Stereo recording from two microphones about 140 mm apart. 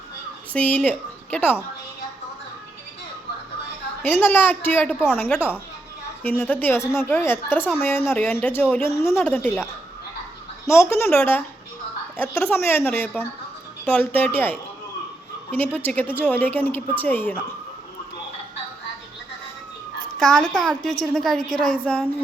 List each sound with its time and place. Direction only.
0.5 s a woman's voice: 10° left (ahead or behind)
4.0 s a woman's voice: 15° left (ahead or behind)
6.2 s a woman's voice: 15° left (ahead or behind)
10.7 s a woman's voice: 20° left (ahead or behind)
20.1 s a woman's voice: centre (ahead or behind)